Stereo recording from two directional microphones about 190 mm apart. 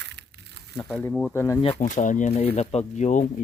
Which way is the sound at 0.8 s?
5° left (ahead or behind).